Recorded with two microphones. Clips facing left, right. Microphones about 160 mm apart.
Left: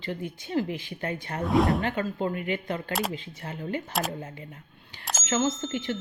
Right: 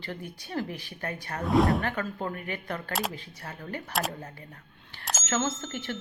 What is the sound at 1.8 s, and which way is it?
Speech, 20° left (ahead or behind).